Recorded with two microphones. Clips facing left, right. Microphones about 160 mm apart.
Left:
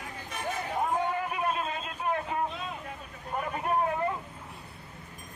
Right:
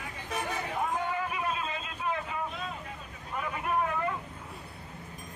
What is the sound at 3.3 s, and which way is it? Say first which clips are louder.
Vehicle: left 2 dB; 40° left (ahead or behind).